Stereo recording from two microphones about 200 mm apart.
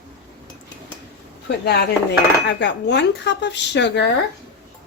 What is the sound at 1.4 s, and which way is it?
Speech, 55° left (ahead or behind).